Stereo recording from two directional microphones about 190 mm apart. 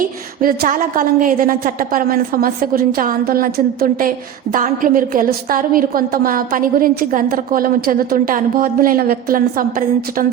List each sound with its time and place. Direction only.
0.0 s a woman's voice: 50° right (ahead or behind)